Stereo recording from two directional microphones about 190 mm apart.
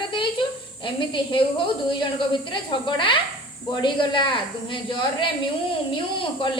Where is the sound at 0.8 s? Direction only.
25° left (ahead or behind).